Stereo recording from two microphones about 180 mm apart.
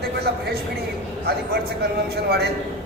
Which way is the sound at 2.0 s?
60° right (ahead or behind).